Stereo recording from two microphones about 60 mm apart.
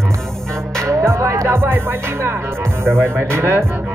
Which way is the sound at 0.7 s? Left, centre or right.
Right.